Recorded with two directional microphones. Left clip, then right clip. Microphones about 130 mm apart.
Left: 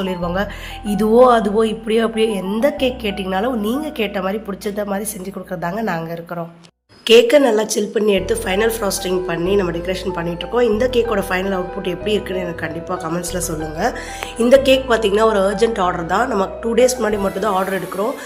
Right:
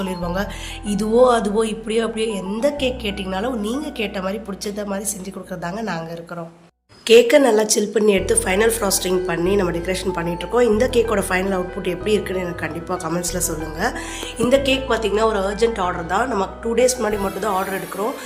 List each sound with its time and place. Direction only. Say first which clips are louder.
0.0 s speech: left 3 dB; 10° left (ahead or behind)
7.1 s speech: left 1 dB; 10° left (ahead or behind)
14.5 s speech: left 6 dB; 35° left (ahead or behind); by 18.1 s 15° left (ahead or behind)